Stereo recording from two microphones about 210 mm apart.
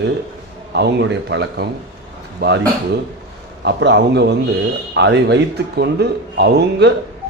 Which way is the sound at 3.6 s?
55° right (ahead or behind).